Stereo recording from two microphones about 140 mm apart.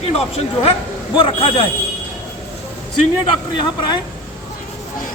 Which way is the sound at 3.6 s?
35° left (ahead or behind).